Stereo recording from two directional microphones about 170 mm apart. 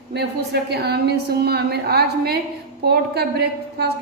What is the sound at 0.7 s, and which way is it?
A woman's voice, 70° right (ahead or behind).